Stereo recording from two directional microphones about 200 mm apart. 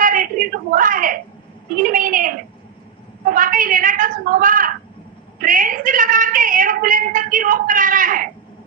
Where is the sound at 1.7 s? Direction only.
45° right (ahead or behind).